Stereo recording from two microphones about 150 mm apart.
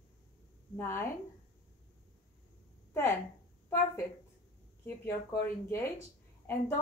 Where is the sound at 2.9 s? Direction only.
15° left (ahead or behind).